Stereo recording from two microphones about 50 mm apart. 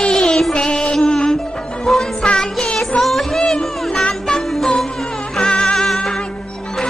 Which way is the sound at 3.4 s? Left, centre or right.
Centre.